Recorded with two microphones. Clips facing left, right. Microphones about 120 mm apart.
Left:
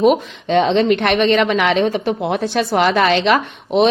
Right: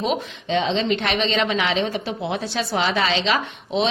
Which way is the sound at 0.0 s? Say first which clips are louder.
Left 10 dB; 55° left (ahead or behind).